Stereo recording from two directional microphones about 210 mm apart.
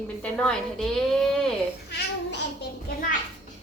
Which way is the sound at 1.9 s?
50° left (ahead or behind).